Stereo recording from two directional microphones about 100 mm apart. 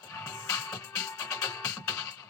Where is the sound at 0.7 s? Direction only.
30° left (ahead or behind).